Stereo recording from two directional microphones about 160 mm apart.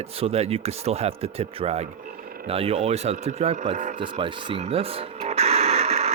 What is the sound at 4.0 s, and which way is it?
Radio, 30° right (ahead or behind).